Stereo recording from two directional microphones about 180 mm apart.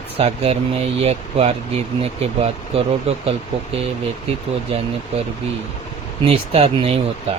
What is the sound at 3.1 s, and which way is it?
Speech, 35° right (ahead or behind).